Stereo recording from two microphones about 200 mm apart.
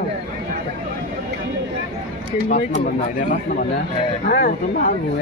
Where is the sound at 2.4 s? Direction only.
40° left (ahead or behind).